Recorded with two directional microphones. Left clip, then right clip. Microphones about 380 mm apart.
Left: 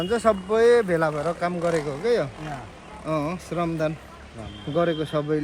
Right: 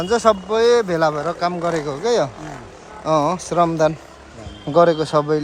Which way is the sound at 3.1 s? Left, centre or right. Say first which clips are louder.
Right 10 dB; centre.